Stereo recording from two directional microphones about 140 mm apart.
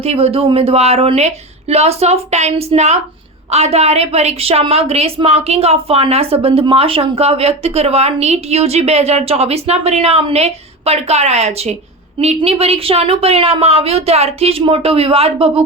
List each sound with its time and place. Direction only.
0.0 s a woman's voice: 45° right (ahead or behind)